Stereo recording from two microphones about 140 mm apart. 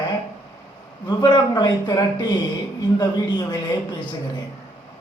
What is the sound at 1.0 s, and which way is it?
Speech, 30° left (ahead or behind).